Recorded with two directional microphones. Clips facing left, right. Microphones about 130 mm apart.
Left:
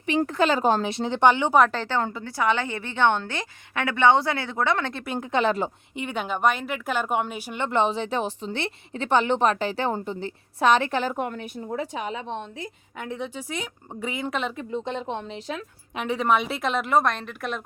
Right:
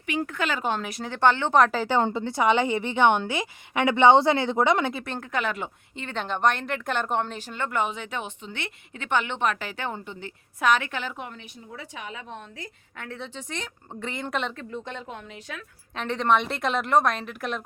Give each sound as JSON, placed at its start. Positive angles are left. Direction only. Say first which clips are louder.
{"t": 0.0, "sound": "speech", "louder": "left 6 dB", "side_deg": 30}
{"t": 2.0, "sound": "a woman's voice", "louder": "right 2 dB", "side_deg": -25}
{"t": 5.0, "sound": "a woman's voice", "louder": "left 4 dB", "side_deg": 10}
{"t": 5.3, "sound": "speech", "louder": "left 6 dB", "side_deg": 30}
{"t": 6.0, "sound": "speech", "louder": "left 1 dB", "side_deg": 10}
{"t": 11.9, "sound": "a woman's voice", "louder": "left 7 dB", "side_deg": 30}
{"t": 14.5, "sound": "speech", "louder": "left 6 dB", "side_deg": 20}
{"t": 16.0, "sound": "a woman's voice", "louder": "even", "side_deg": 10}